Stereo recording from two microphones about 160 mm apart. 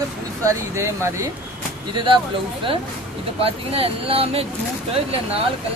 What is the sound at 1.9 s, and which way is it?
Speech, 30° right (ahead or behind).